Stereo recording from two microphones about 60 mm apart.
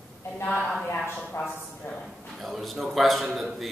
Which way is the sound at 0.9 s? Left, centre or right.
Left.